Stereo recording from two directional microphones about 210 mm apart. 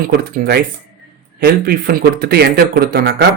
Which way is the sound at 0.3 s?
50° right (ahead or behind).